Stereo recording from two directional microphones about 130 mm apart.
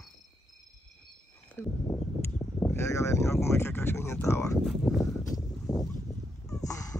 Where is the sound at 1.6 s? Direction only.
15° left (ahead or behind).